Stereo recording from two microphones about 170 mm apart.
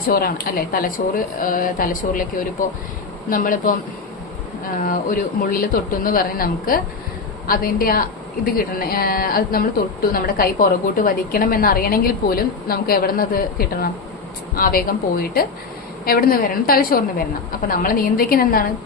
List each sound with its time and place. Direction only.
0.1 s a woman's voice: 60° left (ahead or behind)
4.8 s a woman's voice: 50° left (ahead or behind)